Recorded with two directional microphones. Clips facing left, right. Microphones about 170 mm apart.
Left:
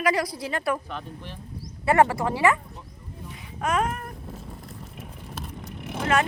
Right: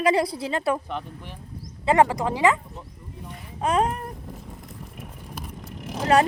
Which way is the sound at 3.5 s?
30° right (ahead or behind).